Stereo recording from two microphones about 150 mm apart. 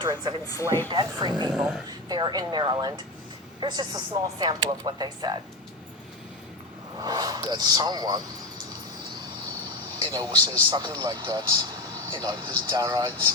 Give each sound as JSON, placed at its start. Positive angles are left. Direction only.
{"t": 0.0, "sound": "speech", "side_deg": -25}
{"t": 0.4, "sound": "speech", "side_deg": 20}
{"t": 0.9, "sound": "speech", "side_deg": -30}
{"t": 1.5, "sound": "speech", "side_deg": -5}
{"t": 1.9, "sound": "speech", "side_deg": -30}
{"t": 7.0, "sound": "speech", "side_deg": -25}
{"t": 10.0, "sound": "speech", "side_deg": -30}